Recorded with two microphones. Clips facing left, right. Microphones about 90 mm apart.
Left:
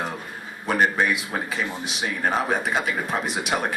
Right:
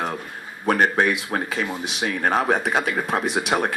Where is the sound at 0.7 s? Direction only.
90° right.